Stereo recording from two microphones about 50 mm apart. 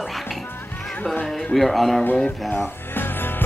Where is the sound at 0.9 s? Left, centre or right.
Centre.